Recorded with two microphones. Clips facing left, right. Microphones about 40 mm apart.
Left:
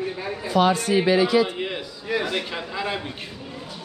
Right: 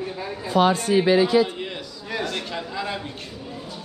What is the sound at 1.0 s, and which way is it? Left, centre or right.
Speech, left.